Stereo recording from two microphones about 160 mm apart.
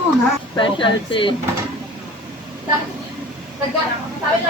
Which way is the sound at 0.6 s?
30° left (ahead or behind).